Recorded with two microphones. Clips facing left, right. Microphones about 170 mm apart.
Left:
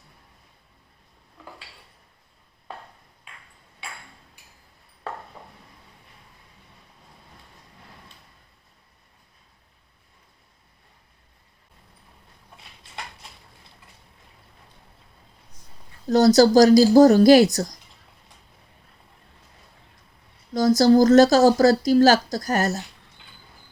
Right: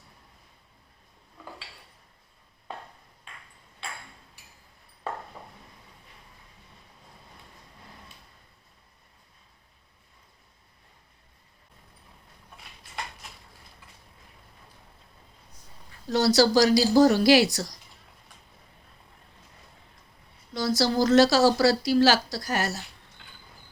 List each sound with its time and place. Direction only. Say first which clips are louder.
16.0 s speech: left 6 dB; 45° left (ahead or behind)
20.5 s speech: left 9 dB; 45° left (ahead or behind)